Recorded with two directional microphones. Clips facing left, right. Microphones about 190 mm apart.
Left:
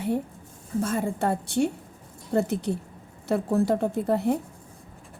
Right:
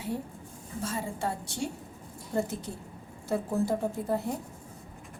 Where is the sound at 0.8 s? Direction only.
55° left (ahead or behind).